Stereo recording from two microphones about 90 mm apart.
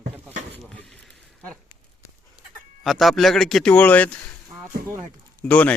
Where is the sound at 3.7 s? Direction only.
15° left (ahead or behind).